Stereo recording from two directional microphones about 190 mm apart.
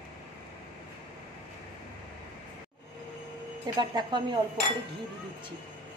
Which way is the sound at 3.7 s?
25° right (ahead or behind).